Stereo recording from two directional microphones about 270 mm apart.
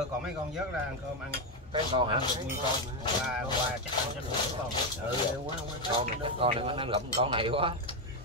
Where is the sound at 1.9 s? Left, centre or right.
Centre.